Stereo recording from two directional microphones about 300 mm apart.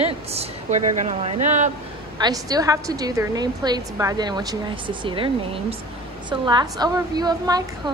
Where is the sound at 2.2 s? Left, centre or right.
Centre.